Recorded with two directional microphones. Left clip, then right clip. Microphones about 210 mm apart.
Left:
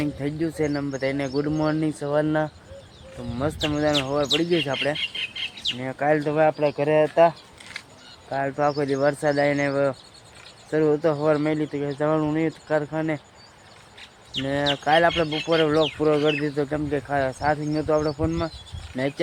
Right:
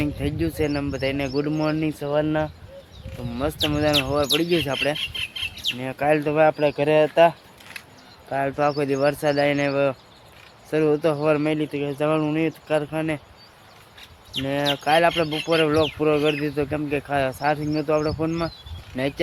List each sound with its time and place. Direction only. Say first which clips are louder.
0.0 s speech: right 1 dB; 5° right (ahead or behind)
5.1 s chicken: right 1 dB; 35° right (ahead or behind)
5.7 s speech: right 1 dB; 5° right (ahead or behind)
14.4 s speech: right 1 dB; 5° right (ahead or behind)